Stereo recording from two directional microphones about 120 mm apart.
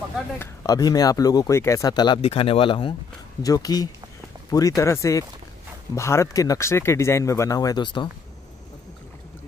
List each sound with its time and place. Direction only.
0.7 s speech: 35° left (ahead or behind)
2.2 s speech: 50° left (ahead or behind)
3.4 s speech: 30° left (ahead or behind)